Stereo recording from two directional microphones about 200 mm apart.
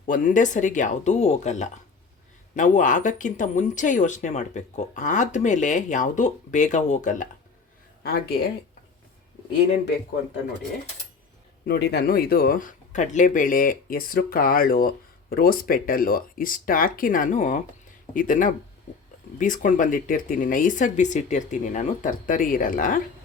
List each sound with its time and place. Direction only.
0.0 s speech: 40° left (ahead or behind)
8.0 s speech: 50° left (ahead or behind)
11.6 s speech: 55° left (ahead or behind)